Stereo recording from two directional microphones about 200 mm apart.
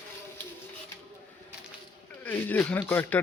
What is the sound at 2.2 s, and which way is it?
Speech, 10° left (ahead or behind).